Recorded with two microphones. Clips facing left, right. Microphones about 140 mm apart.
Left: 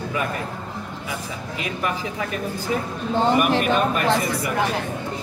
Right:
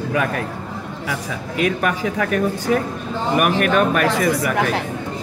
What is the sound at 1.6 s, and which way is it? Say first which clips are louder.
Speech: right 7 dB; 80° right.